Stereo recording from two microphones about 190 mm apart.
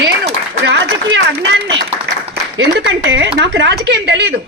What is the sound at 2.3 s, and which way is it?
A woman's voice, 65° right (ahead or behind).